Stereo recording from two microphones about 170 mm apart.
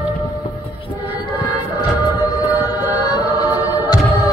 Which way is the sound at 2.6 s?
20° left (ahead or behind).